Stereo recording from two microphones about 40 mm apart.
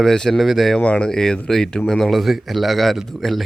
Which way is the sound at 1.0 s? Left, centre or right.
Centre.